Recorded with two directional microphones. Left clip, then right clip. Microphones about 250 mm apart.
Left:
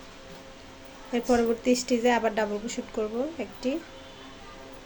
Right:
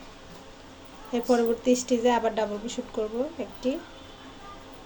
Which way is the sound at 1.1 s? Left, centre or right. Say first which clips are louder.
Right 1 dB; left.